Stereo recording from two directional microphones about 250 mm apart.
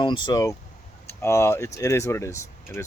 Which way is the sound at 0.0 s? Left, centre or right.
Centre.